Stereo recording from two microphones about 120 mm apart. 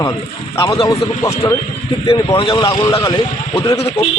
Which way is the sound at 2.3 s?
45° left (ahead or behind).